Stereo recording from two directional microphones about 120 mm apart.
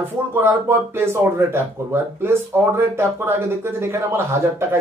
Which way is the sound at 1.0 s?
20° right (ahead or behind).